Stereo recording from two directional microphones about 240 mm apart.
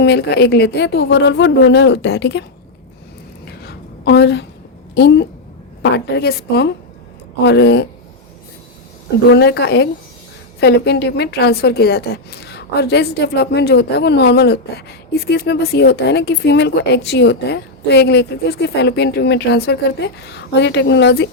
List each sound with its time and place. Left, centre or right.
0.0 s a woman's voice: left
3.4 s a sound: left
4.9 s a woman's voice: left
9.3 s a woman's voice: left